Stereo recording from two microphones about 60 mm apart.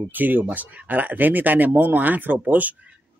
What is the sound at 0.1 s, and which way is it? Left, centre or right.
Speech, right.